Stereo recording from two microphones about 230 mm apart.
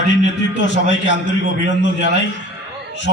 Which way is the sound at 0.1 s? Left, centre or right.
Left.